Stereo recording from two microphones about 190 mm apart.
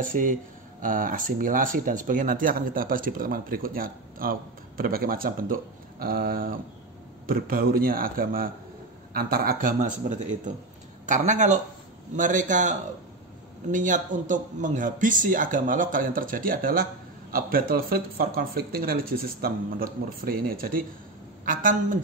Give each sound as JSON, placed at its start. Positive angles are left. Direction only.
{"t": 0.0, "sound": "speech", "side_deg": -45}